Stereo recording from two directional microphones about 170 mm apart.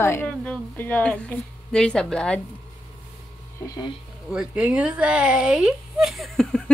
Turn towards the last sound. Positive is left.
turn(degrees=5)  # may be behind; listen again after turning